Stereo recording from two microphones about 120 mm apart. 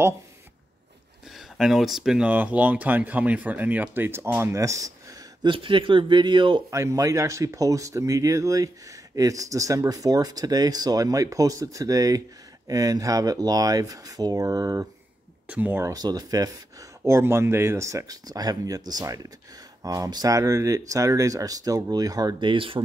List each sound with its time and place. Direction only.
1.3 s speech: centre (ahead or behind); by 4.9 s 25° right (ahead or behind)
5.4 s a man's voice: 45° right (ahead or behind)
6.7 s speech: 25° right (ahead or behind)
15.4 s speech: 15° right (ahead or behind)
15.9 s speech: 35° right (ahead or behind)
17.0 s speech: 20° right (ahead or behind); by 22.8 s 45° right (ahead or behind)